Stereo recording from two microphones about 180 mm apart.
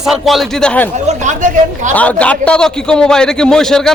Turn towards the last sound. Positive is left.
turn(degrees=5)  # may be behind; listen again after turning